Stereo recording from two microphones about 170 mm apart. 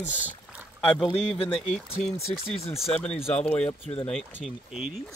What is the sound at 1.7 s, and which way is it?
Speech, 40° left (ahead or behind).